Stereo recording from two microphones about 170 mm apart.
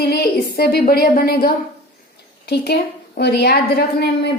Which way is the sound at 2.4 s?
75° left (ahead or behind).